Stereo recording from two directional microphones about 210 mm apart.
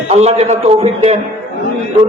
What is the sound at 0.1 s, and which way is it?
Speech, 30° right (ahead or behind).